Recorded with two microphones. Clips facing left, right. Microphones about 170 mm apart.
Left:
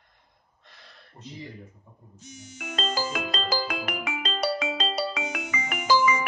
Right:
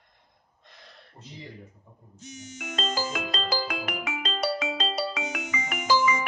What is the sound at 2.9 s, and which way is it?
Music, 45° left (ahead or behind).